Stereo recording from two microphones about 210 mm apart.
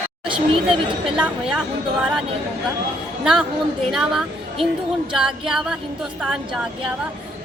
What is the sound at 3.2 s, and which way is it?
Speech, centre (ahead or behind).